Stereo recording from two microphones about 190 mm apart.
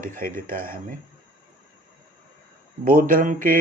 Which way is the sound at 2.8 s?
45° right (ahead or behind).